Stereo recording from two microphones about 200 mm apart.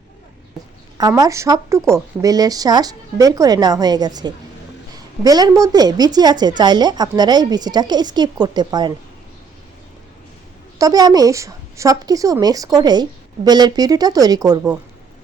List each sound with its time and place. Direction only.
0.9 s a woman's voice: 15° right (ahead or behind)
10.8 s a woman's voice: 20° right (ahead or behind)